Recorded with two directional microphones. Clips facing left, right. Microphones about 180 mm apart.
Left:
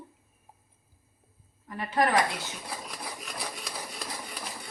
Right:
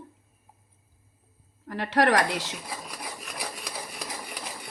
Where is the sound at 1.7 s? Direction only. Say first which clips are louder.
Right 4 dB; 80° right.